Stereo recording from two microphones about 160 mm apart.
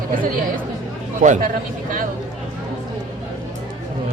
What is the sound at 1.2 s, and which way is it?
Speech, 55° right (ahead or behind).